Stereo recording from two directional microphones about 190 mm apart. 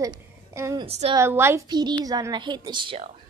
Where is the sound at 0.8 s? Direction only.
35° right (ahead or behind).